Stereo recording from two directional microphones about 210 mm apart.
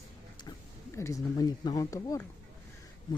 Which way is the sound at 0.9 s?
15° left (ahead or behind).